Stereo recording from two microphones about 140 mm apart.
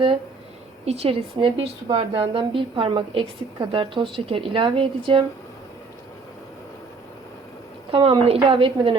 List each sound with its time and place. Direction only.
0.9 s a woman's voice: 45° right (ahead or behind)
7.9 s a woman's voice: 40° right (ahead or behind)